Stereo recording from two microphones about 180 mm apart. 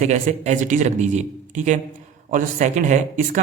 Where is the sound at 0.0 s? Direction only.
40° right (ahead or behind).